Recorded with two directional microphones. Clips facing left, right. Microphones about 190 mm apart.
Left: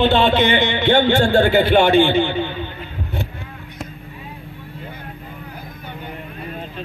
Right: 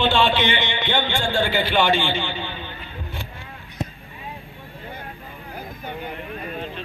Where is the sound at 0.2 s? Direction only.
50° left (ahead or behind).